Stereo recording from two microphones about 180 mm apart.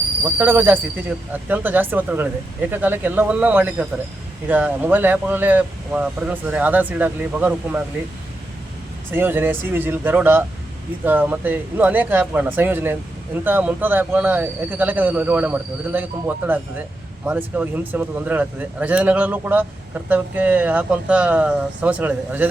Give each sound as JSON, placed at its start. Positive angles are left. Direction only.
{"t": 0.3, "sound": "speech", "side_deg": -10}
{"t": 9.1, "sound": "speech", "side_deg": -10}